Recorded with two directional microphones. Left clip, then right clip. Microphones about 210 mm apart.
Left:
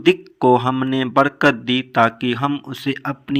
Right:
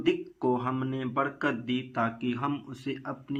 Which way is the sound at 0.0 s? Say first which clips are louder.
Left 12 dB; 40° left (ahead or behind).